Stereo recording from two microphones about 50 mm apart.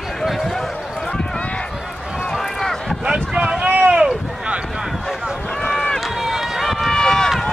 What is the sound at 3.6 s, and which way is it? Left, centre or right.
Boat, right.